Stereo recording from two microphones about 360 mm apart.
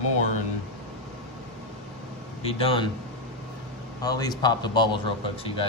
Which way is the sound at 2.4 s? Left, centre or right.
Centre.